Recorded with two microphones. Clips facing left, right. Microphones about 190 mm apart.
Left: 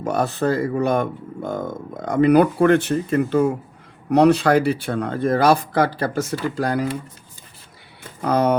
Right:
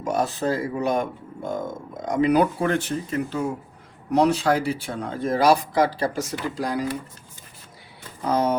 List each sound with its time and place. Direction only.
0.0 s speech: 60° left (ahead or behind)
8.2 s speech: 65° left (ahead or behind)